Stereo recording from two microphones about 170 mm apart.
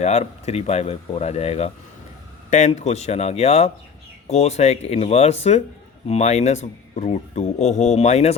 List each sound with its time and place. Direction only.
0.0 s speech: 40° left (ahead or behind)